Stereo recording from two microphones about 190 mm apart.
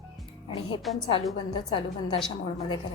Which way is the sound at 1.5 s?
25° left (ahead or behind).